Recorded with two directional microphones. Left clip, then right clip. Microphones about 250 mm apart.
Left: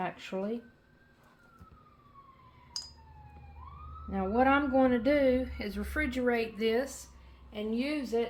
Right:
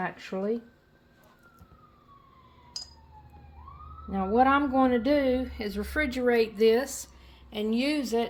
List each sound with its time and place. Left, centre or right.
0.0 s speech: right
4.1 s a woman's voice: right